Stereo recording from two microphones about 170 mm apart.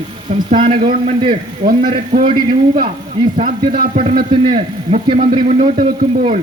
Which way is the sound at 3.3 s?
50° right (ahead or behind).